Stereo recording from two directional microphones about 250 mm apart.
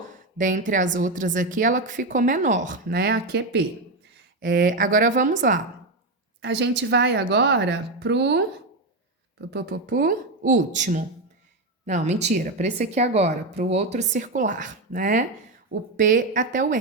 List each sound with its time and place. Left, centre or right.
0.0 s a sound: right
0.9 s a woman's voice: right
6.4 s speech: right
9.5 s a woman's voice: right